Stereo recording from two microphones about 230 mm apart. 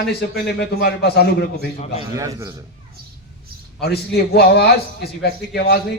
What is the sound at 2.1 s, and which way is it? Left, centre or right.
Speech, centre.